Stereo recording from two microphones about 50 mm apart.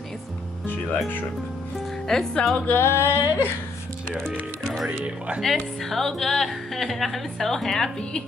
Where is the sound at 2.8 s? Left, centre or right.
Left.